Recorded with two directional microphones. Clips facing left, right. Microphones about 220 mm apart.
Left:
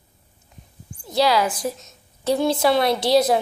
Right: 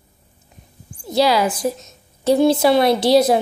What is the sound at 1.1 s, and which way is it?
A woman's voice, 5° right (ahead or behind).